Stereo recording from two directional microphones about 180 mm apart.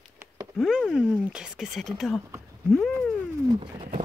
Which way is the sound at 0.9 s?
5° right (ahead or behind).